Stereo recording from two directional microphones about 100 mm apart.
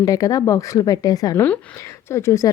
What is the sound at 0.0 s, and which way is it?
Speech, 35° left (ahead or behind).